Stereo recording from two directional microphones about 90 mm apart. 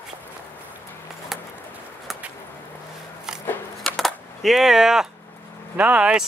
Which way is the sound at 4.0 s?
Centre (ahead or behind).